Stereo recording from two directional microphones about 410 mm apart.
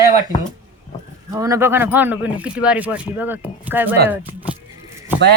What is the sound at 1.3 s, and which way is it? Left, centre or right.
Speech, centre.